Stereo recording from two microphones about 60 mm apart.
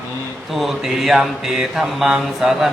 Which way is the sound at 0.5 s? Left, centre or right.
Centre.